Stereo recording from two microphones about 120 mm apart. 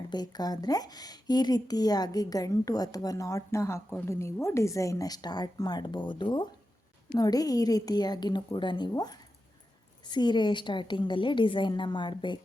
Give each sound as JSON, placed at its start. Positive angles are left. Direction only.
{"t": 0.1, "sound": "speech", "side_deg": 35}